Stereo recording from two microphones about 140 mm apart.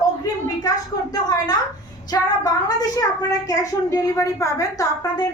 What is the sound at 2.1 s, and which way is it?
Speech, 25° left (ahead or behind).